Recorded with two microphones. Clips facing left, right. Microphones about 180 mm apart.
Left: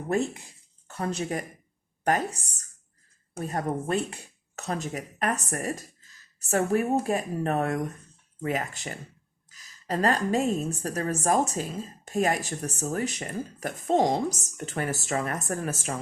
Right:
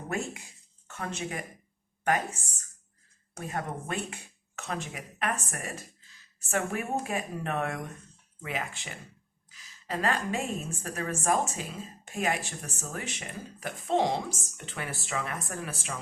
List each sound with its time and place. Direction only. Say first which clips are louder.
0.9 s a woman's voice: left 6 dB; 35° left (ahead or behind)